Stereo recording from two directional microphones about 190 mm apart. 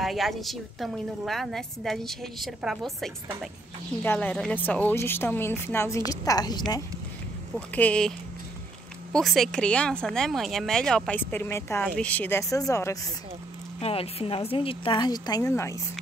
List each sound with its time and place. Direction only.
0.0 s a woman's voice: centre (ahead or behind)
4.0 s a woman's voice: 10° left (ahead or behind)
7.5 s a woman's voice: 5° left (ahead or behind)
9.1 s a woman's voice: centre (ahead or behind); by 12.9 s 15° left (ahead or behind)
13.7 s speech: 30° left (ahead or behind); by 15.8 s 15° left (ahead or behind)